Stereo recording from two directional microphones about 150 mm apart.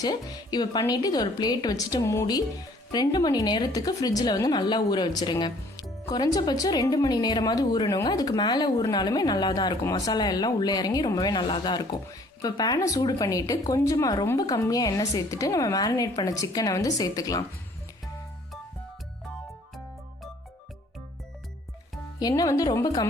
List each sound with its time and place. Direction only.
0.0 s a woman's voice: 25° left (ahead or behind)
22.2 s a woman's voice: 25° left (ahead or behind)